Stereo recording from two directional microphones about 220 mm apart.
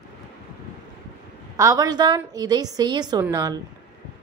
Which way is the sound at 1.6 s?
15° right (ahead or behind).